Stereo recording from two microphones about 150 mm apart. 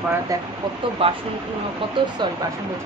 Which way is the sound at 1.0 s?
40° right (ahead or behind).